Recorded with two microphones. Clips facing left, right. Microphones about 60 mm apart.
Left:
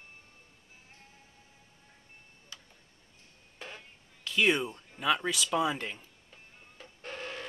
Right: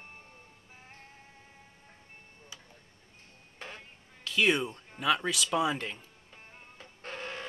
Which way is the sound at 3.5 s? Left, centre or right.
Right.